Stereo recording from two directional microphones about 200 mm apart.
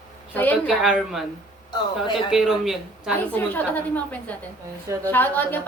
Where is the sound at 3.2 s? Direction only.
10° left (ahead or behind).